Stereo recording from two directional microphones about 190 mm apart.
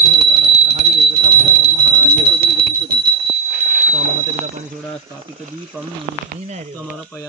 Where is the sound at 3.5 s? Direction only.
50° right (ahead or behind).